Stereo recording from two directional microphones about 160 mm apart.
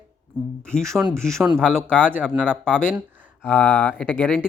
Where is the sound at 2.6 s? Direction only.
5° left (ahead or behind).